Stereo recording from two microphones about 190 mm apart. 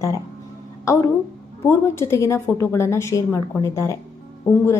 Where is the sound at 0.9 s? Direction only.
15° left (ahead or behind).